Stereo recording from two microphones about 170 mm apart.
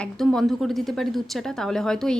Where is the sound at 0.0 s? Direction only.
5° left (ahead or behind).